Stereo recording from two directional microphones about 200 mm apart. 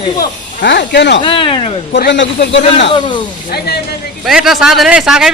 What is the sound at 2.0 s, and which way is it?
Speech, 60° left (ahead or behind).